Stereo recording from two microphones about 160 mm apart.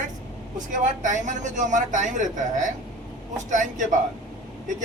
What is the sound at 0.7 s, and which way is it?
A man's voice, 55° right (ahead or behind).